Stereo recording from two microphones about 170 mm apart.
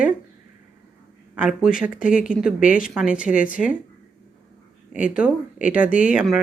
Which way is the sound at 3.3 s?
50° left (ahead or behind).